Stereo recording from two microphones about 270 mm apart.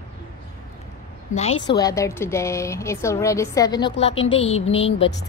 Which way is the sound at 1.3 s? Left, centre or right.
Left.